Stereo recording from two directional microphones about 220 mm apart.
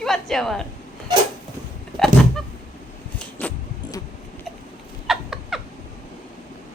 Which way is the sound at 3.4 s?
5° left (ahead or behind).